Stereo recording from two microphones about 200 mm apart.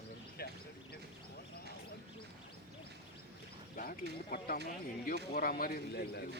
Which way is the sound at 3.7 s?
45° left (ahead or behind).